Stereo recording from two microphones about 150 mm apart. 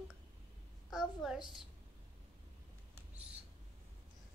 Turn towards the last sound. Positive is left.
turn(degrees=-10)  # may be behind; listen again after turning